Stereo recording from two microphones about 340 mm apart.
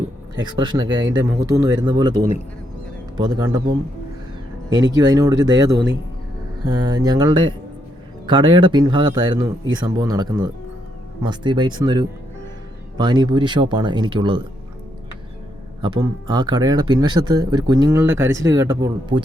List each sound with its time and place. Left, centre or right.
0.3 s speech: centre
4.9 s speech: centre
15.8 s speech: centre